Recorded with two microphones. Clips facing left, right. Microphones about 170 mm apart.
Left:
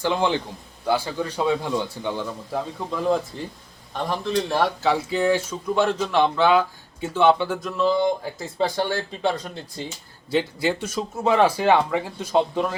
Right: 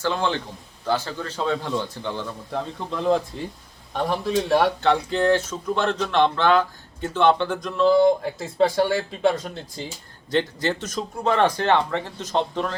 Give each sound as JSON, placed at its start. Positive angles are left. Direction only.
{"t": 0.0, "sound": "a man's voice", "side_deg": 15}
{"t": 10.3, "sound": "a man's voice", "side_deg": 10}